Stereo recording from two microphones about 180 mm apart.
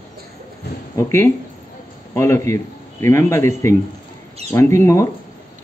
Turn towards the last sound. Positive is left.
turn(degrees=15)  # may be behind; listen again after turning